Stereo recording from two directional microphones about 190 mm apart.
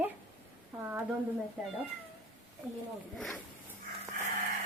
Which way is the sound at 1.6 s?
5° right (ahead or behind).